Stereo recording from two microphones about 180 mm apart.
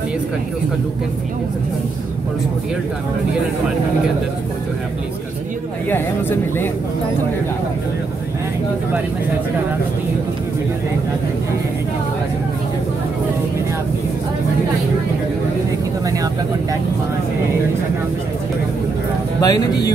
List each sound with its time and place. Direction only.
5.9 s speech: 10° left (ahead or behind)
19.4 s speech: 20° left (ahead or behind)